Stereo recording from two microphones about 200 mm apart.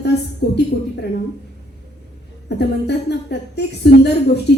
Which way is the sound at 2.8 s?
55° left (ahead or behind).